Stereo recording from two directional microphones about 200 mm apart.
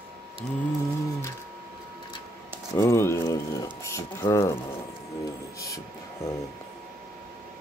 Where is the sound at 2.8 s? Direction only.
15° left (ahead or behind).